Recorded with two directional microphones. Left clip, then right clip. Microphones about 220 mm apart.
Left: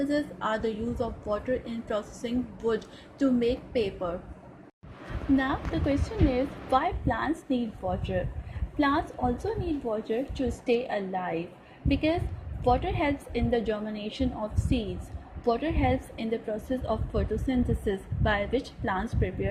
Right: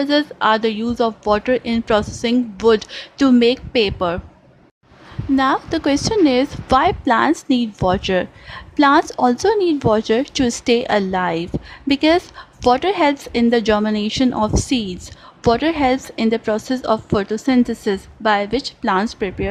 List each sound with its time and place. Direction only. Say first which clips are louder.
0.0 s a woman's voice: right 12 dB; 45° right (ahead or behind)
5.4 s a woman's voice: right 12 dB; 30° right (ahead or behind)